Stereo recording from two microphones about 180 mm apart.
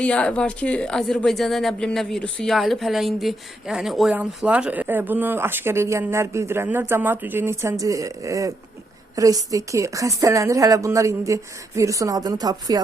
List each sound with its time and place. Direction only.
0.0 s speech: 5° left (ahead or behind); by 12.8 s 20° right (ahead or behind)